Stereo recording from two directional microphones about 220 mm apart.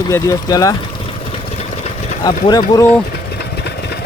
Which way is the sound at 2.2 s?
15° left (ahead or behind).